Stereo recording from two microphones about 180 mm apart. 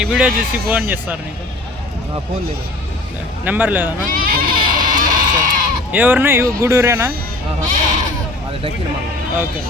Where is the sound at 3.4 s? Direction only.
10° right (ahead or behind).